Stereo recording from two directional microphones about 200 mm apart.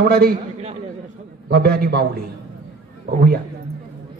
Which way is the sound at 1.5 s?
50° right (ahead or behind).